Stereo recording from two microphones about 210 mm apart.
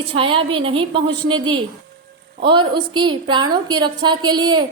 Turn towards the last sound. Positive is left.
turn(degrees=-20)  # may be behind; listen again after turning